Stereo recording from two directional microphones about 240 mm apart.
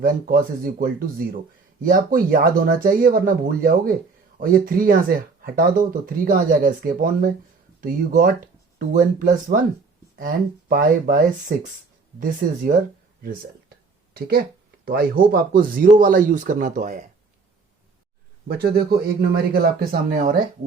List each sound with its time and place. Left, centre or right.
0.0 s speech: right
13.2 s a sound: right
14.8 s speech: right
18.4 s speech: right